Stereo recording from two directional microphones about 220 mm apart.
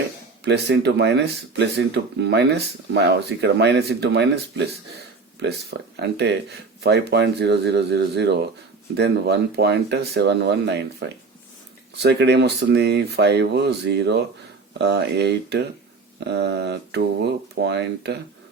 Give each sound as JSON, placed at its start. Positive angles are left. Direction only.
{"t": 0.4, "sound": "speech", "side_deg": -50}
{"t": 6.0, "sound": "speech", "side_deg": -50}